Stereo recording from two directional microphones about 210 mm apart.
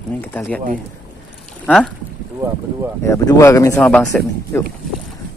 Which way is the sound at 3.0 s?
15° left (ahead or behind).